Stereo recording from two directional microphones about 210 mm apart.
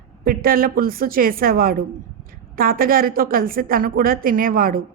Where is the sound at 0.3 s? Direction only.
45° right (ahead or behind).